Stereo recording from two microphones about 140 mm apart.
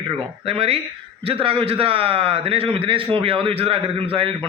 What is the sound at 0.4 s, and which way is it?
A man's voice, 45° right (ahead or behind).